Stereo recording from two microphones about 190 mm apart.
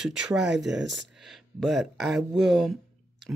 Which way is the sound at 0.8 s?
70° right (ahead or behind).